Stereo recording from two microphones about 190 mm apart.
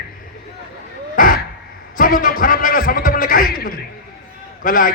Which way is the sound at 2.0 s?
45° left (ahead or behind).